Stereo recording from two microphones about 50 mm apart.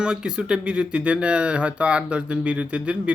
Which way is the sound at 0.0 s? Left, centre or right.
Centre.